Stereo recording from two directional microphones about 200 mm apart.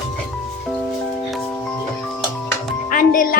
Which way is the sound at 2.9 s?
45° left (ahead or behind).